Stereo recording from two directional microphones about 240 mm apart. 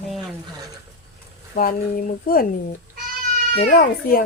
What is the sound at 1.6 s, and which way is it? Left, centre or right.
Speech, left.